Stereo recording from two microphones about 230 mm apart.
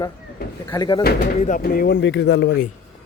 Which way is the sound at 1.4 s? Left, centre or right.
Left.